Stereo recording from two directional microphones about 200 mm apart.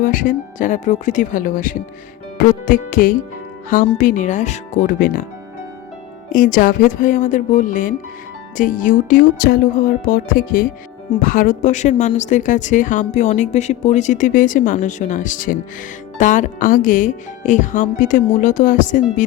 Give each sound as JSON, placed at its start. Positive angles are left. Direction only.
{"t": 0.0, "sound": "speech", "side_deg": 40}
{"t": 6.3, "sound": "speech", "side_deg": 45}
{"t": 8.5, "sound": "music", "side_deg": 40}
{"t": 11.2, "sound": "speech", "side_deg": 45}